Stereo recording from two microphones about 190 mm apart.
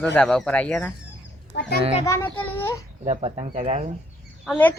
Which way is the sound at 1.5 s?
65° left (ahead or behind).